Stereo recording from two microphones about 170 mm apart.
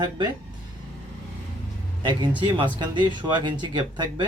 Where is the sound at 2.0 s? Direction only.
25° right (ahead or behind).